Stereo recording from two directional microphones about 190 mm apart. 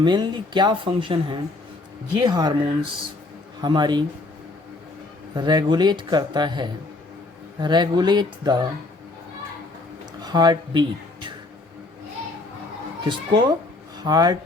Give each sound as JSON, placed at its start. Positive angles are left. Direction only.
{"t": 0.0, "sound": "speech", "side_deg": -25}
{"t": 5.3, "sound": "speech", "side_deg": -20}
{"t": 10.2, "sound": "a sound", "side_deg": -20}
{"t": 13.1, "sound": "speech", "side_deg": -25}